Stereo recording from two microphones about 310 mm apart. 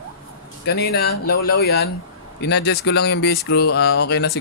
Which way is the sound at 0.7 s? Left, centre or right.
Left.